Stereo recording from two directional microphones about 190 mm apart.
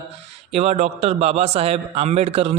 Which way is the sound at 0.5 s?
35° right (ahead or behind).